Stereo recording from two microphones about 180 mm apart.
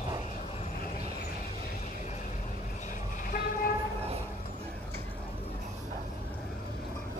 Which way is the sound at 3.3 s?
55° left (ahead or behind).